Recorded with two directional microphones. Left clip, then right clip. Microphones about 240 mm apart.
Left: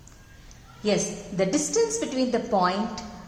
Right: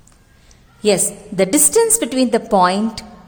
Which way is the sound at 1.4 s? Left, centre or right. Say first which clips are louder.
Right 9 dB; right.